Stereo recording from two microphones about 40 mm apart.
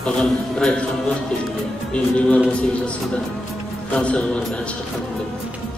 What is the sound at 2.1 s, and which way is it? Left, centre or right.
Speech, left.